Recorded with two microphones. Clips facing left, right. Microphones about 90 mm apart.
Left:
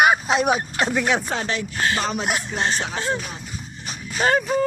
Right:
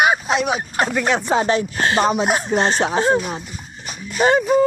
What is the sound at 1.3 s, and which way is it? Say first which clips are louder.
Speech: right 8 dB; 25° right (ahead or behind).